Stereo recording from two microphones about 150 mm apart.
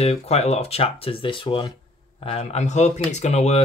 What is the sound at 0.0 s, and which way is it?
Speech, 45° left (ahead or behind).